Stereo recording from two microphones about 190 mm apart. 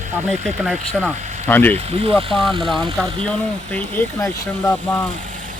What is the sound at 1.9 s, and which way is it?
Speech, 30° right (ahead or behind).